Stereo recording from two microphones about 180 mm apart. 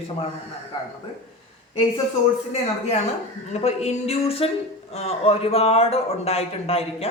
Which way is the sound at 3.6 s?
35° left (ahead or behind).